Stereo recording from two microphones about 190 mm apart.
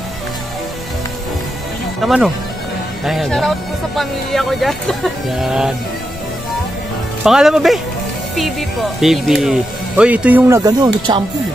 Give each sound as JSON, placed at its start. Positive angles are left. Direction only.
{"t": 2.0, "sound": "speech", "side_deg": 0}
{"t": 7.2, "sound": "speech", "side_deg": 0}